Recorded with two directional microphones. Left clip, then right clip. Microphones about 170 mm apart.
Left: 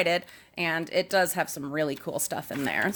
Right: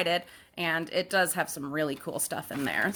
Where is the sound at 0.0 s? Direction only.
20° left (ahead or behind).